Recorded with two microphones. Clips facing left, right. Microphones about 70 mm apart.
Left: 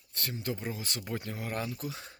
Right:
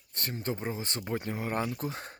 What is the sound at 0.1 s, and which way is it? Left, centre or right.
Speech, right.